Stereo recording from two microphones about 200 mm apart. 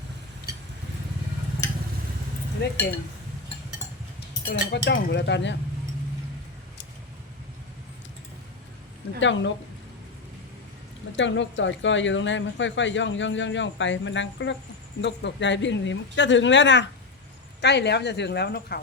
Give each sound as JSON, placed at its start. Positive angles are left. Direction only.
{"t": 2.6, "sound": "speech", "side_deg": 55}
{"t": 4.4, "sound": "speech", "side_deg": 60}
{"t": 9.2, "sound": "a woman's voice", "side_deg": 65}
{"t": 11.2, "sound": "a woman's voice", "side_deg": 65}